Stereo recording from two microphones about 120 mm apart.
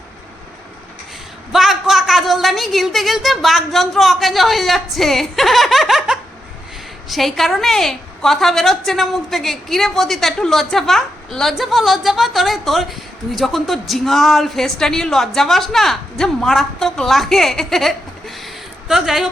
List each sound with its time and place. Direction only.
1.5 s a woman's voice: centre (ahead or behind)